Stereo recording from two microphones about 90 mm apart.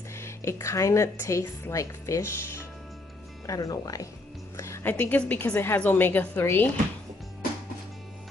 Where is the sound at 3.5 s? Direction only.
40° left (ahead or behind).